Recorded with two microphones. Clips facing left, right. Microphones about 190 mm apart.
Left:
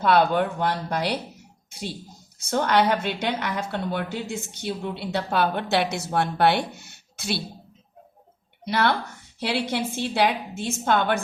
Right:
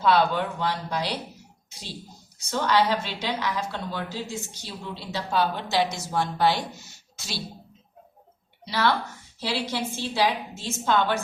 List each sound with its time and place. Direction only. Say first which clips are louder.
0.0 s speech: left 2 dB; 55° left (ahead or behind)
2.4 s a woman's voice: left 2 dB; 55° left (ahead or behind)
8.6 s a woman's voice: left 1 dB; 55° left (ahead or behind)